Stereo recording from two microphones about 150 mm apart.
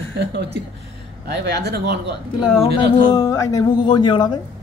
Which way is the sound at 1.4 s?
90° right.